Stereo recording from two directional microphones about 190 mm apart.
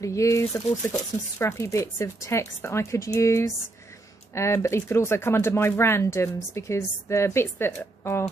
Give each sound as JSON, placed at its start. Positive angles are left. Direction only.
{"t": 0.0, "sound": "speech", "side_deg": 15}